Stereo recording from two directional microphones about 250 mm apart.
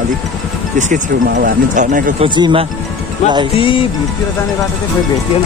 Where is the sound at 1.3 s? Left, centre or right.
Right.